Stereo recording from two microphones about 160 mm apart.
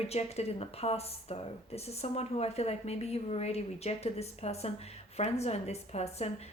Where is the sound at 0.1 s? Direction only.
40° left (ahead or behind).